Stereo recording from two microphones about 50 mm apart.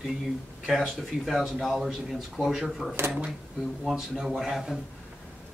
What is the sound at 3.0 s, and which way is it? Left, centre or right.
Speech, right.